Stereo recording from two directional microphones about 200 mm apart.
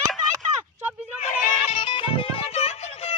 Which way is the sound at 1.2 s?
35° left (ahead or behind).